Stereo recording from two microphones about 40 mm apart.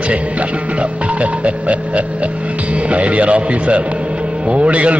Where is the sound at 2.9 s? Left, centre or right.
Right.